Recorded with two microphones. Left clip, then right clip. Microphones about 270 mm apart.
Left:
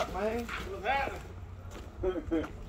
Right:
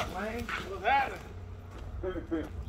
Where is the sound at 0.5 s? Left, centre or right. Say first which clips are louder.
Right 4 dB; centre.